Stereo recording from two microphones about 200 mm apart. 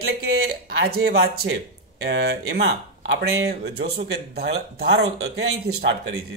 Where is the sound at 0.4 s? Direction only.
50° right (ahead or behind).